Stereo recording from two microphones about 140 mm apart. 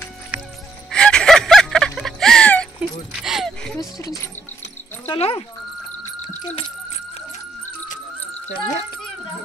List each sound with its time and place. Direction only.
0.9 s music: 5° left (ahead or behind)
2.8 s keys jangling: 5° right (ahead or behind)
4.0 s speech: 25° left (ahead or behind)
5.0 s speech: 40° left (ahead or behind)